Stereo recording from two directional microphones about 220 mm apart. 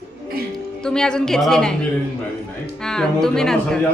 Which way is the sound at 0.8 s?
5° left (ahead or behind).